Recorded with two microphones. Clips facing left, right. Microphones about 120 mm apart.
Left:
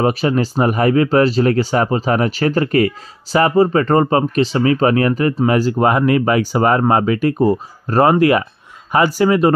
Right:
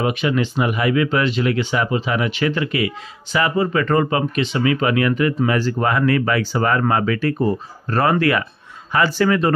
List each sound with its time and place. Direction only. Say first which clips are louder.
0.0 s speech: left 4 dB; 40° left (ahead or behind)
8.1 s speech: left 5 dB; 20° left (ahead or behind)